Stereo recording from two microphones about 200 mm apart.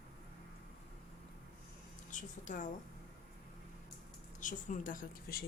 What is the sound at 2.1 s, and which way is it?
Speech, 40° left (ahead or behind).